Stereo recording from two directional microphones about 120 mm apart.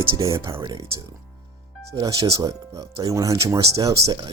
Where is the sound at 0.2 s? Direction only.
25° right (ahead or behind).